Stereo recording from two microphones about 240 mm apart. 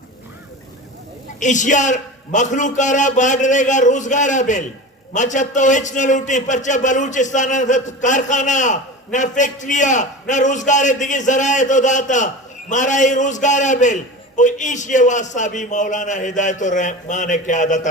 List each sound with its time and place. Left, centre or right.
1.4 s a man's voice: left